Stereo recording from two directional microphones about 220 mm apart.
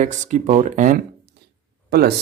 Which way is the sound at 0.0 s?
35° right (ahead or behind).